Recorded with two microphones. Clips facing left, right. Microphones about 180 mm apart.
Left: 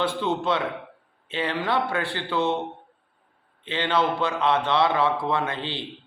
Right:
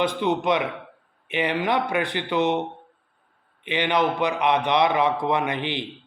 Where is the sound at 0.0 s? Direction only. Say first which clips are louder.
Right 2 dB; 15° right (ahead or behind).